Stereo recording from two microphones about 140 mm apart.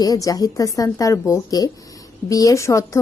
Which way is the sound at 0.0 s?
25° left (ahead or behind).